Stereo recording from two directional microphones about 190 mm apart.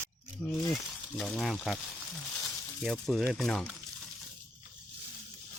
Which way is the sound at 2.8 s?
Centre (ahead or behind).